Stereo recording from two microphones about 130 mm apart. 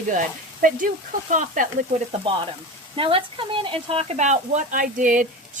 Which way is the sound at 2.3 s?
40° right (ahead or behind).